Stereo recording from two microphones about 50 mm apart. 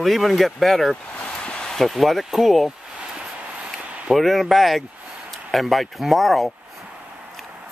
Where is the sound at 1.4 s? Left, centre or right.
Centre.